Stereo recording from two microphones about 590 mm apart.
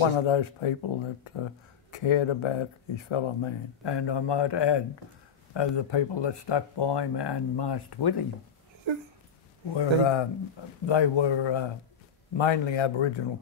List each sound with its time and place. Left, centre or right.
0.0 s speech: left
8.9 s a sound: right
9.8 s speech: left